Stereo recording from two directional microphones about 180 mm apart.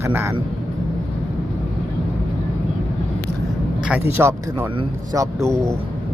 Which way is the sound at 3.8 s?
10° right (ahead or behind).